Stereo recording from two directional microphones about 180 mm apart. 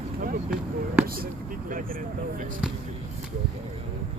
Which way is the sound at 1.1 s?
50° right (ahead or behind).